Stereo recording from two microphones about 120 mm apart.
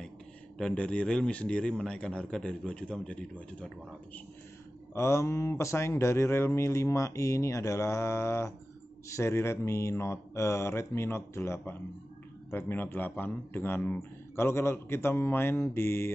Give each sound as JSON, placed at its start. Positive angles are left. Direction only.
{"t": 0.6, "sound": "a man's voice", "side_deg": 10}
{"t": 4.9, "sound": "speech", "side_deg": 20}